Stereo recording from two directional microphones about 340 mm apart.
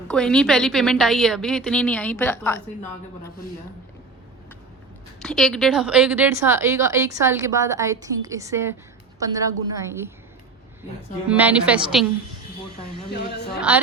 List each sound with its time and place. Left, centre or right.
0.1 s a woman's voice: centre
5.2 s a woman's voice: centre
11.3 s a woman's voice: centre
13.1 s a woman's voice: left
13.6 s a woman's voice: centre